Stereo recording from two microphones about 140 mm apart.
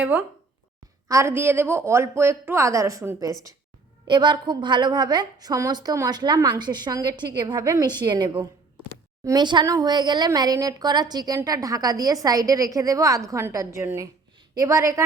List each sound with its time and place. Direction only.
0.0 s a woman's voice: 15° right (ahead or behind)
4.0 s a woman's voice: 35° right (ahead or behind)